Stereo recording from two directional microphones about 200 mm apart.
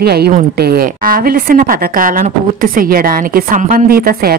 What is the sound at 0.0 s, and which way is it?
A woman's voice, 50° right (ahead or behind).